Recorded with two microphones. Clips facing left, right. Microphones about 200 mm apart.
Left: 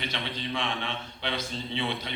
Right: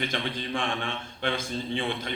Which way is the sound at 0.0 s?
50° right (ahead or behind).